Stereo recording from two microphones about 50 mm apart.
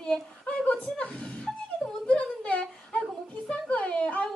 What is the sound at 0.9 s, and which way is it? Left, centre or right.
Music, centre.